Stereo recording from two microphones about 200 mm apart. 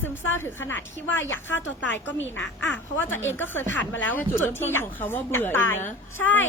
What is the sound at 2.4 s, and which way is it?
Speech, 65° left (ahead or behind).